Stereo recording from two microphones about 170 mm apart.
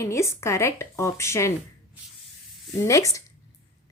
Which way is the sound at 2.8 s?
20° left (ahead or behind).